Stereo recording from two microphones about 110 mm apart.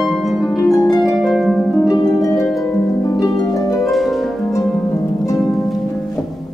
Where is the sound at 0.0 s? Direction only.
Centre (ahead or behind).